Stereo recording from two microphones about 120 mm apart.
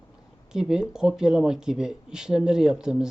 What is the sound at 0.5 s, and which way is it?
Speech, 5° right (ahead or behind).